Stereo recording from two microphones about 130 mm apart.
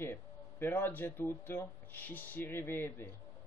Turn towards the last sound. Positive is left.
turn(degrees=15)  # may be behind; listen again after turning